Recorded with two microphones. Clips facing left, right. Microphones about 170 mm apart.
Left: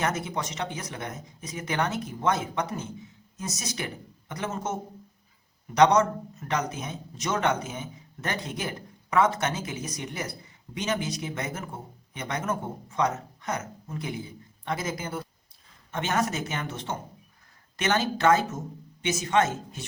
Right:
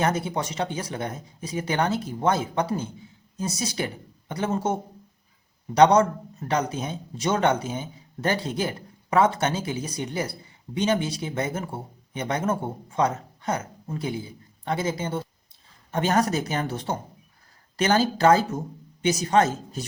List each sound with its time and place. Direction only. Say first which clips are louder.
0.0 s a man's voice: right 4 dB; 30° right (ahead or behind)